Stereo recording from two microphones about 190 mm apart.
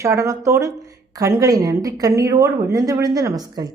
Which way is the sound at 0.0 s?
15° right (ahead or behind).